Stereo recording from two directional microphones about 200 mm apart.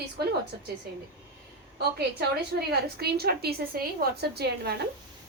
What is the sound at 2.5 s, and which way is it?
A woman's voice, 50° right (ahead or behind).